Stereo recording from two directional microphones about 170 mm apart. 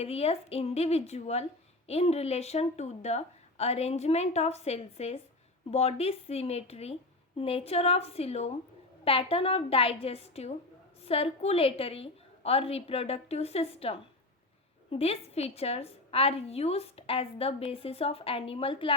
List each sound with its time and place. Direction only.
0.0 s a woman's voice: 35° left (ahead or behind)